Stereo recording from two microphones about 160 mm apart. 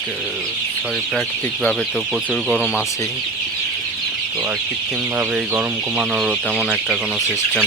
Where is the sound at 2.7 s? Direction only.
20° left (ahead or behind).